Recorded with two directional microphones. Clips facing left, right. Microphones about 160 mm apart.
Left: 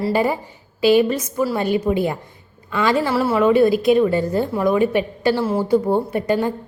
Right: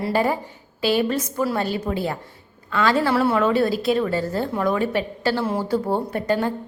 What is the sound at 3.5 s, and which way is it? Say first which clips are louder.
A woman's voice: left 6 dB; 15° left (ahead or behind).